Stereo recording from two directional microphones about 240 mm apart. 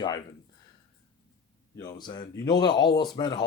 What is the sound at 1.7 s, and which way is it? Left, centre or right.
Speech, centre.